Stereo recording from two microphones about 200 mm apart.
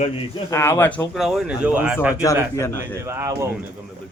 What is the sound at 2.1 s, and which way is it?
Speech, 15° left (ahead or behind).